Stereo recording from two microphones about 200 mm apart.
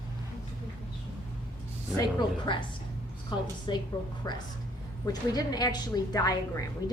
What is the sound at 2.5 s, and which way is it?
A woman's voice, 25° left (ahead or behind).